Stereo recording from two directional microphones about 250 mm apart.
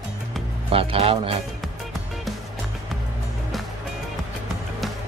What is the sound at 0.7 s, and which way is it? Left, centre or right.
Speech, right.